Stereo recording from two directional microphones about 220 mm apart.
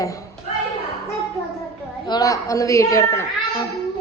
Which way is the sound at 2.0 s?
15° left (ahead or behind).